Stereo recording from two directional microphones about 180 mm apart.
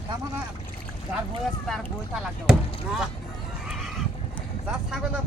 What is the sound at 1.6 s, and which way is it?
Speech, centre (ahead or behind).